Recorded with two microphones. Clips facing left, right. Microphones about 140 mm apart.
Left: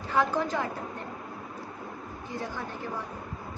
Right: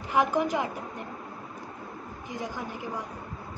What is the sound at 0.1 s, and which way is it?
Speech, 15° right (ahead or behind).